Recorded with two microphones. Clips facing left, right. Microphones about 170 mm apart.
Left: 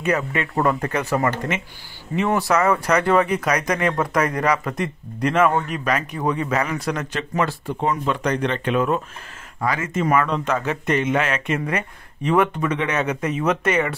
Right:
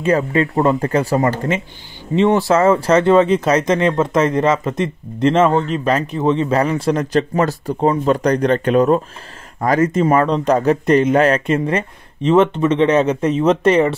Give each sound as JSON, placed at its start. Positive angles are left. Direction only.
{"t": 0.0, "sound": "speech", "side_deg": -30}
{"t": 10.0, "sound": "speech", "side_deg": -30}